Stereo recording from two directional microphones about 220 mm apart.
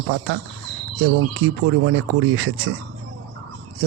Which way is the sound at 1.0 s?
60° right (ahead or behind).